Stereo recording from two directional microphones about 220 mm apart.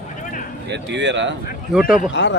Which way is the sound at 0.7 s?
50° right (ahead or behind).